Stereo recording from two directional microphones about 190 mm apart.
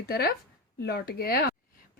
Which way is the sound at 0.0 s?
55° left (ahead or behind).